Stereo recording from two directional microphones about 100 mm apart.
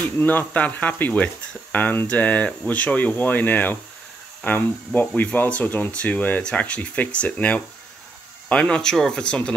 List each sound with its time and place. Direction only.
0.2 s speech: 20° left (ahead or behind)